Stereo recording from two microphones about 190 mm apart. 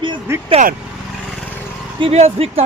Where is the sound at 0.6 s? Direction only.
35° right (ahead or behind).